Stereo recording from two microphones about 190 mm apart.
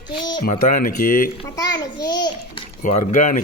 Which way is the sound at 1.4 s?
20° left (ahead or behind).